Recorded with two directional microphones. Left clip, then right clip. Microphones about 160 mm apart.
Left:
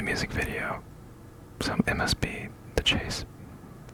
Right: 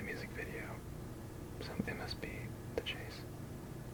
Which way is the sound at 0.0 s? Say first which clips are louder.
Left 14 dB; 40° left (ahead or behind).